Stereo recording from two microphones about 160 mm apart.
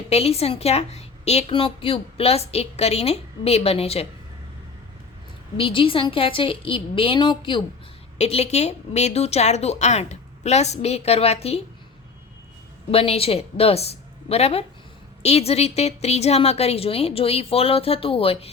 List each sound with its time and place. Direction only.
0.1 s a woman's voice: 40° left (ahead or behind)
5.5 s a woman's voice: 35° left (ahead or behind)
8.2 s a woman's voice: 40° left (ahead or behind)
12.9 s a woman's voice: 35° left (ahead or behind)